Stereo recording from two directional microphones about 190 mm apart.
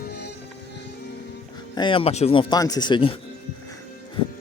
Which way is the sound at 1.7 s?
25° left (ahead or behind).